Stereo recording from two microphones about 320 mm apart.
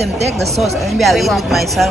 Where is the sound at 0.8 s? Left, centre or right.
Centre.